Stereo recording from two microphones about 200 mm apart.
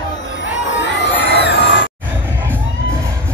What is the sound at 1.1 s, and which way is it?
Crowd, 55° left (ahead or behind).